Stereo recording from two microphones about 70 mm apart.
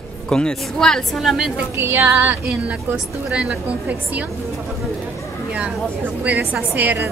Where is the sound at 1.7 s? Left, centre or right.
Right; by 4.2 s centre.